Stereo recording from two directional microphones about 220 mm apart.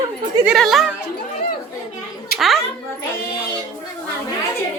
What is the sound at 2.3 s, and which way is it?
Speech, centre (ahead or behind).